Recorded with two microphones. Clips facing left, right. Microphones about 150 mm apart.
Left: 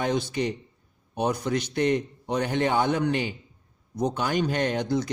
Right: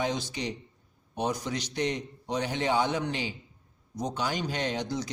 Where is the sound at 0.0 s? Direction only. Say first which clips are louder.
Left 5 dB; 55° left (ahead or behind).